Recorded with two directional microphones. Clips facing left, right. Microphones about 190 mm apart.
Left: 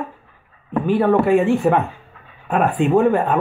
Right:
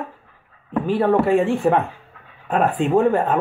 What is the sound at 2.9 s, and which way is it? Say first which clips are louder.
Speech: left 1 dB; 35° right (ahead or behind).